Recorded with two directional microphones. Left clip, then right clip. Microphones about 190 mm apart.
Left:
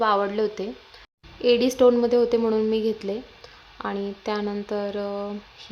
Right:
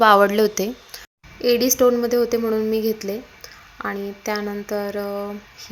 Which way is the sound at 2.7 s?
Centre (ahead or behind).